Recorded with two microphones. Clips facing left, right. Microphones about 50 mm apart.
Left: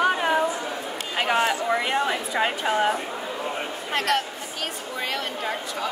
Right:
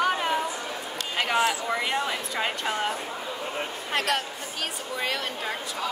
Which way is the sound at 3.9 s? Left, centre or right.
Centre.